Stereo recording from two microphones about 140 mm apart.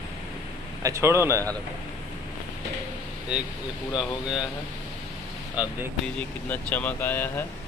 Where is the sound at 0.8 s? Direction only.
20° right (ahead or behind).